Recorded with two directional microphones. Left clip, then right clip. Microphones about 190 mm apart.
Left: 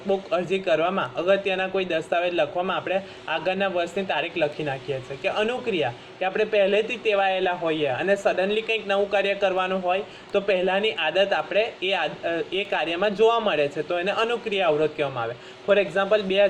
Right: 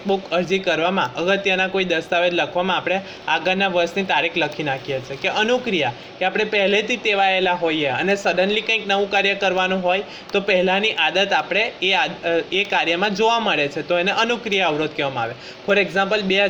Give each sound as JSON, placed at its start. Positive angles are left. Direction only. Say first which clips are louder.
{"t": 0.1, "sound": "a man's voice", "louder": "right 4 dB", "side_deg": -25}